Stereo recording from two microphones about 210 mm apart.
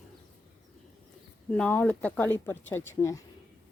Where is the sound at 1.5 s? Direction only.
5° left (ahead or behind).